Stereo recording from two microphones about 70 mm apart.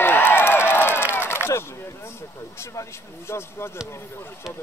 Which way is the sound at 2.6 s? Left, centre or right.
Left.